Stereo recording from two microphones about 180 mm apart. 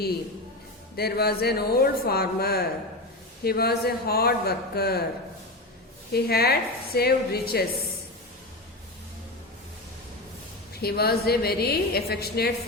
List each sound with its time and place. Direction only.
0.9 s a woman's voice: 60° left (ahead or behind)
6.1 s a woman's voice: 60° left (ahead or behind)
10.8 s a woman's voice: 60° left (ahead or behind)